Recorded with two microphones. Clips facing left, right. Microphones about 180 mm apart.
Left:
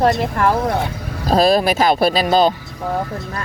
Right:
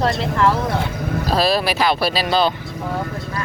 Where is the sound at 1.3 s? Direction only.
45° left (ahead or behind).